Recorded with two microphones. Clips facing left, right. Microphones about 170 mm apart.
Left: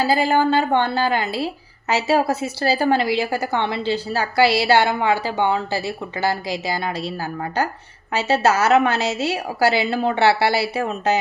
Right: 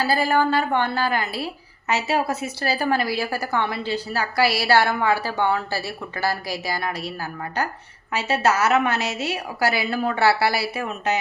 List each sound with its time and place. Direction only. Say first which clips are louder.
0.0 s a woman's voice: left 3 dB; 20° left (ahead or behind)